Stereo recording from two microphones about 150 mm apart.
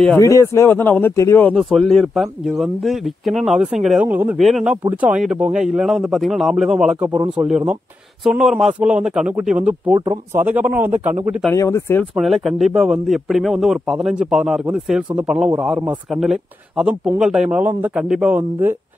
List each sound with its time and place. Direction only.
0.2 s speech: 20° left (ahead or behind)
1.6 s speech: centre (ahead or behind)
4.4 s speech: centre (ahead or behind)
11.5 s speech: 20° left (ahead or behind)
12.2 s speech: centre (ahead or behind)